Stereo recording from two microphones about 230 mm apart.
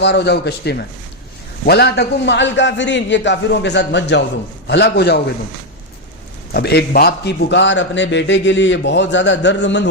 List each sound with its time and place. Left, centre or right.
0.0 s a man's voice: left
6.5 s a man's voice: left